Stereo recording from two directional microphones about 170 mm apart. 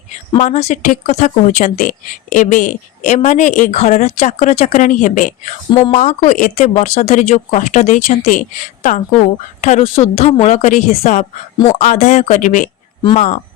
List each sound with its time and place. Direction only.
0.3 s speech: 40° left (ahead or behind)